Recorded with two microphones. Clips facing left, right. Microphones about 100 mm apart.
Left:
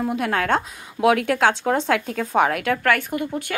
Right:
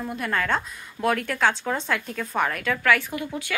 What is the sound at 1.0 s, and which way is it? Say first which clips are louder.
A woman's voice: left 5 dB; 85° left.